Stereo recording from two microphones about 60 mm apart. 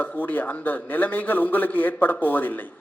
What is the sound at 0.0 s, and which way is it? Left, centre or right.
A man's voice, left.